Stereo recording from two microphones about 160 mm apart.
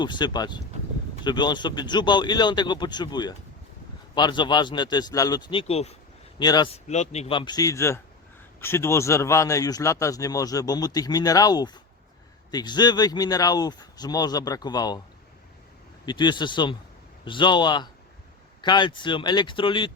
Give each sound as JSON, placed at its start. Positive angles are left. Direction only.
{"t": 0.0, "sound": "a man's voice", "side_deg": 30}
{"t": 6.4, "sound": "a man's voice", "side_deg": 25}
{"t": 6.7, "sound": "speech", "side_deg": 45}
{"t": 7.3, "sound": "a man's voice", "side_deg": 25}
{"t": 16.0, "sound": "a man's voice", "side_deg": 30}